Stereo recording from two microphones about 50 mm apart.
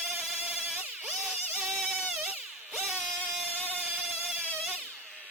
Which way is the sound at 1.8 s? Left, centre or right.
Centre.